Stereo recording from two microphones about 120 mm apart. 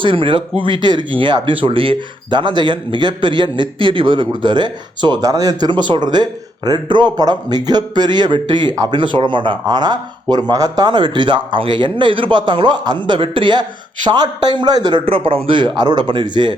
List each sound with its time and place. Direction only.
0.0 s speech: 45° right (ahead or behind)
15.0 s speech: 50° right (ahead or behind)